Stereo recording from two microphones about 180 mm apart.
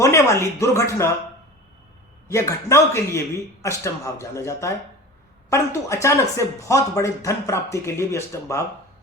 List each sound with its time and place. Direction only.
0.0 s speech: 15° left (ahead or behind)
2.2 s speech: 15° left (ahead or behind)